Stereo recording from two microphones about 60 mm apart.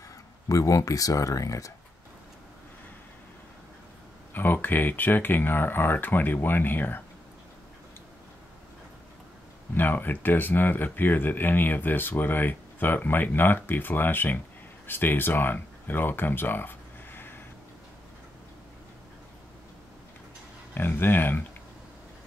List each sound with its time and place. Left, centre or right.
0.5 s speech: left
4.3 s speech: left
9.8 s speech: left
20.7 s speech: left